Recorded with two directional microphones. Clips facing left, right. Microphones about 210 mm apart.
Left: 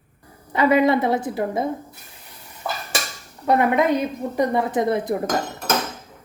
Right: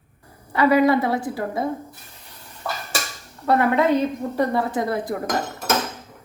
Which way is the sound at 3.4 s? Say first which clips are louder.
Even; 15° left (ahead or behind).